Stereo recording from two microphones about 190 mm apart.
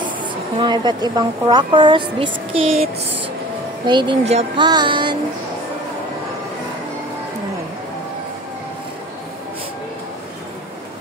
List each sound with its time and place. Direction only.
0.6 s a woman's voice: 25° right (ahead or behind)
4.6 s a woman's voice: 25° right (ahead or behind)